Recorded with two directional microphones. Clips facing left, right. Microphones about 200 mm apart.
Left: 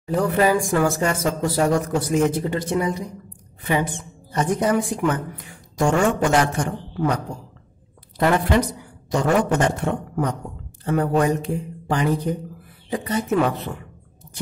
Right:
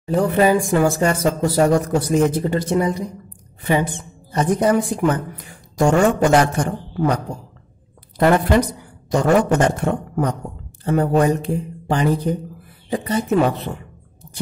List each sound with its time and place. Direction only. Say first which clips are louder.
0.0 s a woman's voice: right 3 dB; 25° right (ahead or behind)
8.2 s a woman's voice: right 4 dB; 40° right (ahead or behind)
10.9 s a woman's voice: right 3 dB; 30° right (ahead or behind)